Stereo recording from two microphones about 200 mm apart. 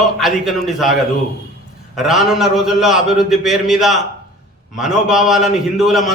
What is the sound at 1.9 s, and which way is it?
A man's voice, centre (ahead or behind).